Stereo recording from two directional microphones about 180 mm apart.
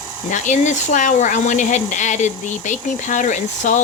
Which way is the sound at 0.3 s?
45° left (ahead or behind).